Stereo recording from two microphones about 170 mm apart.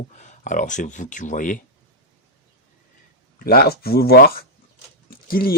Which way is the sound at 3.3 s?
60° left (ahead or behind).